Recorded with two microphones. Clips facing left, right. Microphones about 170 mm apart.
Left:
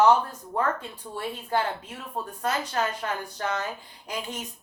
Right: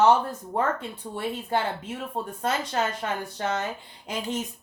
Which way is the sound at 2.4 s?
25° right (ahead or behind).